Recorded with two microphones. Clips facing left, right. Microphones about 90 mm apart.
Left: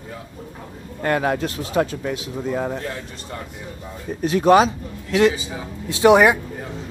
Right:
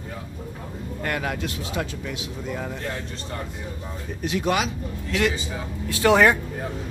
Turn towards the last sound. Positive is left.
turn(degrees=15)  # may be behind; listen again after turning